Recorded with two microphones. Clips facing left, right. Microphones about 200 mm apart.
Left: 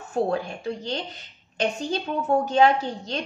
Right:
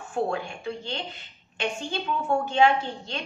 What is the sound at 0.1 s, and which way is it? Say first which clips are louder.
A woman's voice: left 3 dB; 40° left (ahead or behind).